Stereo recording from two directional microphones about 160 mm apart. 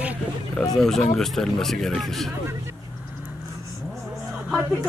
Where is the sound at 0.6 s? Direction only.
5° left (ahead or behind).